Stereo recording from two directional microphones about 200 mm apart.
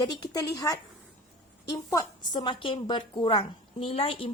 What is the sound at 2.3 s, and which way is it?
A woman's voice, 25° left (ahead or behind).